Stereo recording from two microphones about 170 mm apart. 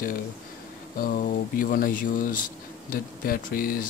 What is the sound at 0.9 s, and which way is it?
Speech, 55° left (ahead or behind).